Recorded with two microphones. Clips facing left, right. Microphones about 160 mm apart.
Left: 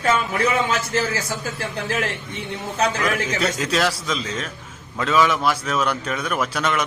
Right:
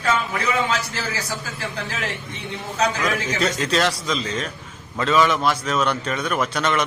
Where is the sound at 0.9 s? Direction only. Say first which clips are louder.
Left 6 dB; 50° left (ahead or behind).